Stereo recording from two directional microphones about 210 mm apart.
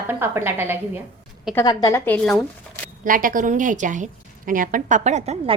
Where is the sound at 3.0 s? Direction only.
40° right (ahead or behind).